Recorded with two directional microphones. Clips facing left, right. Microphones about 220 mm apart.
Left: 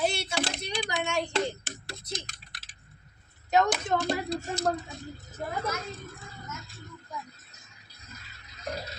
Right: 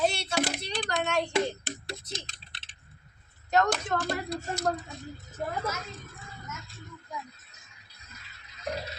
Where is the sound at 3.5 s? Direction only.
5° left (ahead or behind).